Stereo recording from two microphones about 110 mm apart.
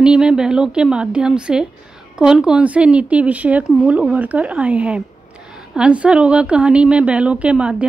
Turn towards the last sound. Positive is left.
turn(degrees=-10)  # may be behind; listen again after turning